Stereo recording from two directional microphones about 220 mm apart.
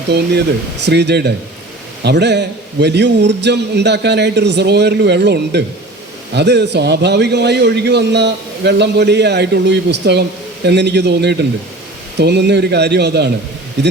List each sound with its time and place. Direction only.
0.1 s a man's voice: 50° right (ahead or behind)